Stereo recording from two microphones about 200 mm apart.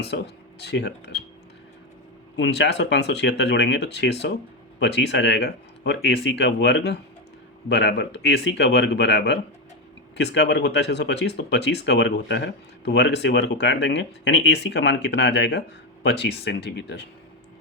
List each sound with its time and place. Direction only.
0.6 s speech: 55° left (ahead or behind)
2.3 s speech: 60° left (ahead or behind)